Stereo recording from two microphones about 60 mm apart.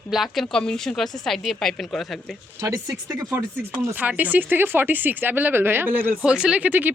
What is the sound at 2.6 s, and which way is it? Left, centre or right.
Speech, right.